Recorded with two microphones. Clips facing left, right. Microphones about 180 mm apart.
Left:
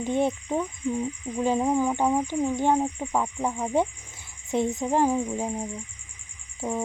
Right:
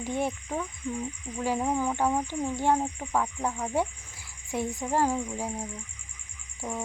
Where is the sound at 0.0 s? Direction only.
20° left (ahead or behind).